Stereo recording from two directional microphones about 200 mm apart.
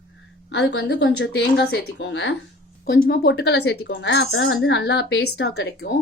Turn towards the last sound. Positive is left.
turn(degrees=60)  # may be behind; listen again after turning